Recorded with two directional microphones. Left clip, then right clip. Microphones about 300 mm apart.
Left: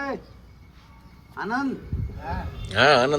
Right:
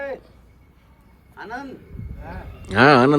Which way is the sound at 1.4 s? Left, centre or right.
Centre.